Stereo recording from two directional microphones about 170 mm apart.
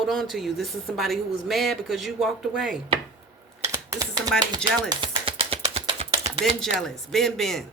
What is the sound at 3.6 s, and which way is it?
Typing, 20° right (ahead or behind).